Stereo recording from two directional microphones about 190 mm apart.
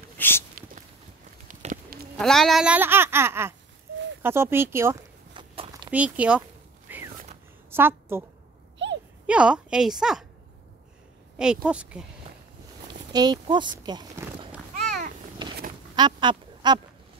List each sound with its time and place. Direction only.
0.2 s a sound: 10° left (ahead or behind)
1.5 s a sound: 40° right (ahead or behind)
2.1 s speech: centre (ahead or behind)
5.3 s walk: 25° right (ahead or behind)
5.9 s speech: 5° right (ahead or behind)
6.9 s a sound: 10° right (ahead or behind)
7.7 s a woman's voice: 10° right (ahead or behind)
8.8 s a sound: 65° right (ahead or behind)
9.2 s a woman's voice: 5° right (ahead or behind)
11.3 s speech: 5° right (ahead or behind)
13.1 s speech: 20° right (ahead or behind)
16.0 s duck: 25° right (ahead or behind)